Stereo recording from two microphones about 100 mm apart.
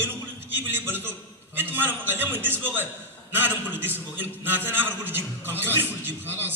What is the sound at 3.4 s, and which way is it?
A man's voice, 20° right (ahead or behind).